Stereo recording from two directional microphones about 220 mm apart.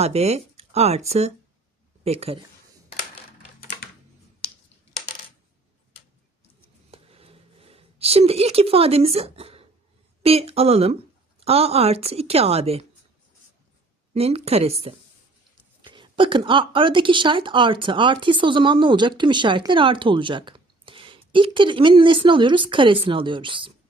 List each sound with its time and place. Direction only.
0.0 s speech: 30° right (ahead or behind)
6.9 s a sound: 25° right (ahead or behind)
10.2 s speech: 25° right (ahead or behind)
14.1 s speech: 25° right (ahead or behind)